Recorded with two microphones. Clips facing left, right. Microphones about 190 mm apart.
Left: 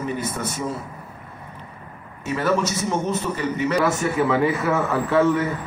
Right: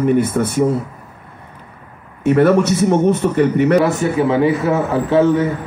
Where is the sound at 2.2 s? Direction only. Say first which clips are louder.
Right 10 dB; 60° right (ahead or behind).